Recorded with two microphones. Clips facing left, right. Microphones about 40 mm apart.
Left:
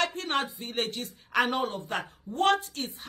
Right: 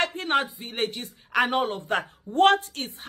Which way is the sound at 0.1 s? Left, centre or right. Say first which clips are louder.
Right 6 dB; centre.